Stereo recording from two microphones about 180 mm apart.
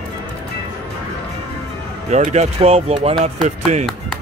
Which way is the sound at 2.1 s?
40° right (ahead or behind).